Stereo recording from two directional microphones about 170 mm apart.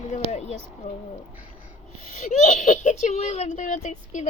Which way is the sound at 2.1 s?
45° left (ahead or behind).